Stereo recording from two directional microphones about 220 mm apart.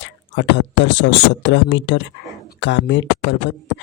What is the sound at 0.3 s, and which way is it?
Speech, 55° left (ahead or behind).